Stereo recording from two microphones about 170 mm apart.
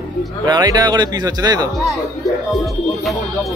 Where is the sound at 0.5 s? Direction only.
25° right (ahead or behind).